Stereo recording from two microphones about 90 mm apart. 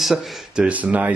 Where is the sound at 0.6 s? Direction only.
15° right (ahead or behind).